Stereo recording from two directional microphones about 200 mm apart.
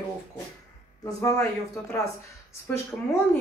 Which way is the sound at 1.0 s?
15° left (ahead or behind).